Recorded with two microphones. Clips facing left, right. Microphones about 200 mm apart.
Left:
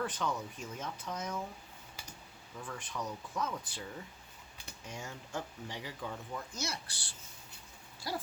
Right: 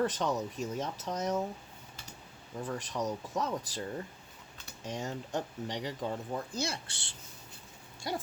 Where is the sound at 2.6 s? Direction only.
40° right (ahead or behind).